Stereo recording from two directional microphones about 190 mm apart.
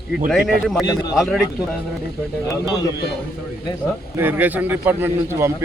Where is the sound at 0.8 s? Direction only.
20° left (ahead or behind).